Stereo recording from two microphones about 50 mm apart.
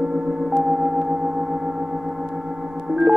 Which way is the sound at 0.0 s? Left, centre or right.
Centre.